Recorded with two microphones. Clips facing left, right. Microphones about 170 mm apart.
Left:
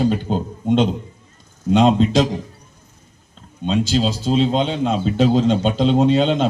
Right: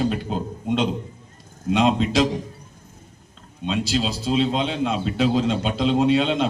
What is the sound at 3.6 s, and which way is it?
A man's voice, 35° left (ahead or behind).